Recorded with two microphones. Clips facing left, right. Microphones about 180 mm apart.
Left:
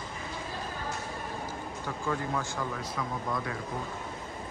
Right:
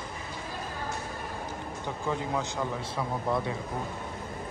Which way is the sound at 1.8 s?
20° right (ahead or behind).